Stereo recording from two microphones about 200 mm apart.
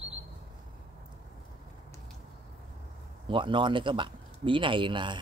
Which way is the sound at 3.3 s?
25° right (ahead or behind).